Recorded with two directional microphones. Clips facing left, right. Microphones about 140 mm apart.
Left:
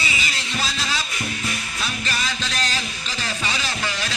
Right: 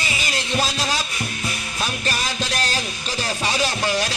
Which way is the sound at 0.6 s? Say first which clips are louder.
Right 2 dB; 45° right (ahead or behind).